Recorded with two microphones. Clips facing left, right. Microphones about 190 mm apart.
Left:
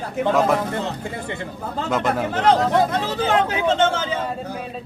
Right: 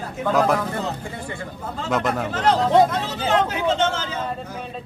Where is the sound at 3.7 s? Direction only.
55° left (ahead or behind).